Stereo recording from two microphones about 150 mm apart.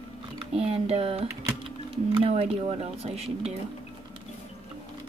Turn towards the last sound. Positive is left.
turn(degrees=-45)  # may be behind; listen again after turning